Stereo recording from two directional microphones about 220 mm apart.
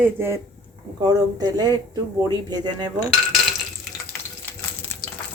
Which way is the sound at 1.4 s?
20° right (ahead or behind).